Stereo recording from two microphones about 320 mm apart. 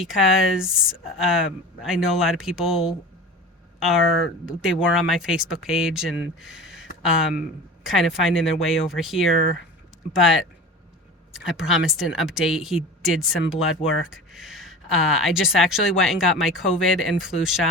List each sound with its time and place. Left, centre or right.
0.5 s speech: centre
11.3 s speech: centre
13.7 s speech: left
14.1 s speech: centre